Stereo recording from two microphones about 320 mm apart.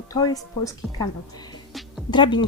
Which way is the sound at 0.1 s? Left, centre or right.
Centre.